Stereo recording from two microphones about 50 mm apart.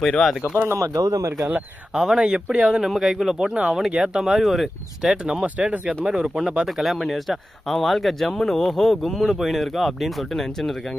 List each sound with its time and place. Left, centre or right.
0.0 s speech: centre
0.7 s speech: right
1.9 s speech: centre
2.9 s speech: centre
3.3 s speech: centre
4.2 s speech: centre
5.1 s speech: centre
6.8 s speech: centre